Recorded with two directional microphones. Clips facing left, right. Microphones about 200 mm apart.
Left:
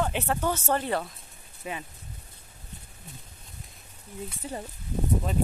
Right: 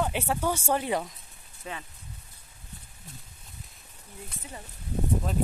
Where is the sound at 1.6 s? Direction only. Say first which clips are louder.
Left 3 dB; 10° left (ahead or behind).